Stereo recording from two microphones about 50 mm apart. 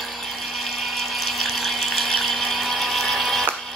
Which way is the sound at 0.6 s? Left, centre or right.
Centre.